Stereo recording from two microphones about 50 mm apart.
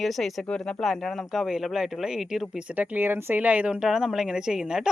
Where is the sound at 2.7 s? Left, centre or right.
Right.